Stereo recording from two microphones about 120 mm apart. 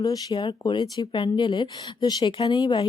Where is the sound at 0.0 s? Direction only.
30° left (ahead or behind).